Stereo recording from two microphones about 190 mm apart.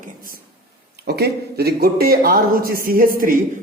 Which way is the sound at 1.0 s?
55° right (ahead or behind).